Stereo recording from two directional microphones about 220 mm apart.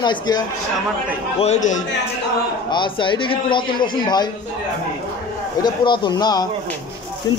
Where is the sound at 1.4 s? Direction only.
30° left (ahead or behind).